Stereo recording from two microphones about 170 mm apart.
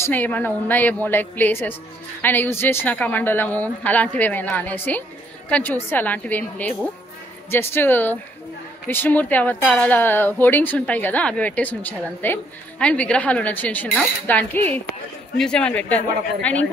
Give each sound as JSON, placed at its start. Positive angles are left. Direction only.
{"t": 0.0, "sound": "speech", "side_deg": 10}